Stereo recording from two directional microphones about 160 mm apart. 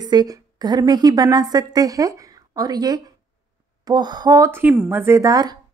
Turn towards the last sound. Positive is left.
turn(degrees=-20)  # may be behind; listen again after turning